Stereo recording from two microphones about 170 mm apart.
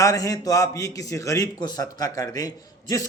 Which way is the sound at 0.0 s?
20° left (ahead or behind).